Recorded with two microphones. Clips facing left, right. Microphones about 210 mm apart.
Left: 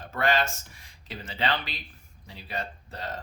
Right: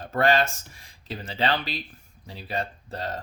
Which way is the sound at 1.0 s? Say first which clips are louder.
Right 3 dB; 35° right (ahead or behind).